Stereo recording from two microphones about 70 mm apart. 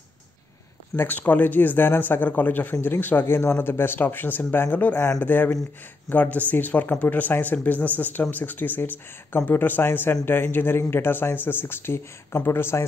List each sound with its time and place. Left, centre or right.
0.9 s a man's voice: left